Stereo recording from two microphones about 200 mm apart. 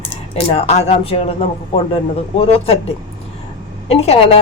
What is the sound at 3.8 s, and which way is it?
Speech, 30° left (ahead or behind).